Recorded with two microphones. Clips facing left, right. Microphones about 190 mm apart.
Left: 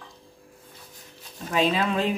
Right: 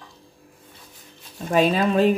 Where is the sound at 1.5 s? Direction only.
45° right (ahead or behind).